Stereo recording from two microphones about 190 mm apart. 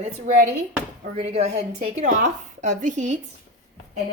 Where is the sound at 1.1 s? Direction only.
35° right (ahead or behind).